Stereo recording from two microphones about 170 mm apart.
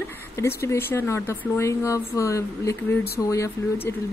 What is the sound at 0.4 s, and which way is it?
Speech, 15° left (ahead or behind).